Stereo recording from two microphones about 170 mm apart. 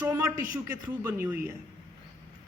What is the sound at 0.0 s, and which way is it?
A woman's voice, 15° right (ahead or behind).